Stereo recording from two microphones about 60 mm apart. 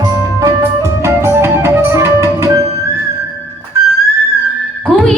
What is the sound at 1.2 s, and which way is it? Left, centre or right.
Music, right.